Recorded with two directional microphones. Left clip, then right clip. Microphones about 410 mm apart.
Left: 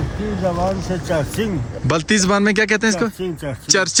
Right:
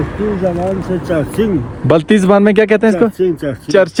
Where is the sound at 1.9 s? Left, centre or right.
Centre.